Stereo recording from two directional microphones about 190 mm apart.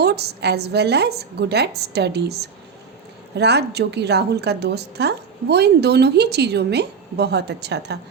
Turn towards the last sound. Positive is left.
turn(degrees=-60)  # may be behind; listen again after turning